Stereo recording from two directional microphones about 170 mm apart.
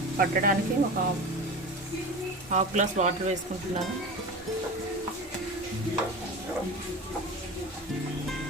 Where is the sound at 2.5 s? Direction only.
45° right (ahead or behind).